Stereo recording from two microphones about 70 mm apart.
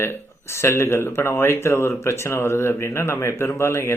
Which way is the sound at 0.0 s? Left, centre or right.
Left.